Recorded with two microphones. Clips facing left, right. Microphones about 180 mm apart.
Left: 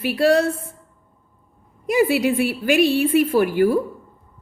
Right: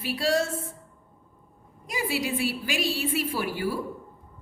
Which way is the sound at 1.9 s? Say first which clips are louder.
Left 11 dB; 65° left (ahead or behind).